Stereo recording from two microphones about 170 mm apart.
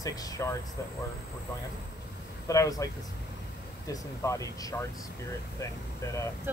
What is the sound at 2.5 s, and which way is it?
Speech, 20° left (ahead or behind).